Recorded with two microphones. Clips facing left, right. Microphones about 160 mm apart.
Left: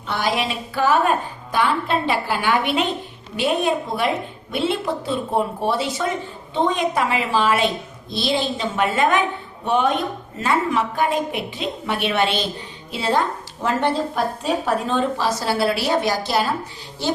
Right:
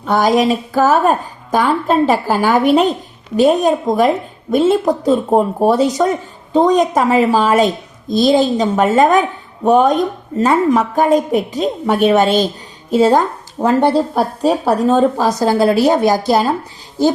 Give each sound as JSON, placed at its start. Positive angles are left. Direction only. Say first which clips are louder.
{"t": 0.0, "sound": "speech", "louder": "right 10 dB", "side_deg": -45}